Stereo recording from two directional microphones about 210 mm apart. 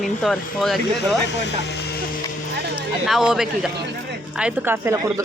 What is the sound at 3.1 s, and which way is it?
Speech, centre (ahead or behind).